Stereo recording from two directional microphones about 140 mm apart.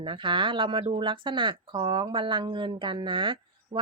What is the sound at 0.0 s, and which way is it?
Speech, 35° right (ahead or behind).